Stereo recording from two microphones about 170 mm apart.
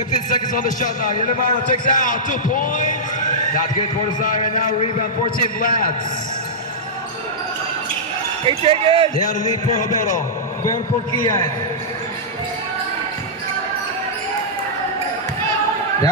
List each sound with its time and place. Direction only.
0.3 s a man's voice: 50° left (ahead or behind)
4.2 s a man's voice: 50° left (ahead or behind)
8.5 s speech: 35° right (ahead or behind)
9.3 s a man's voice: 45° left (ahead or behind)